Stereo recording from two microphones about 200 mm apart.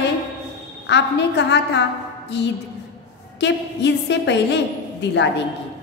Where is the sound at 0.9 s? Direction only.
60° left (ahead or behind).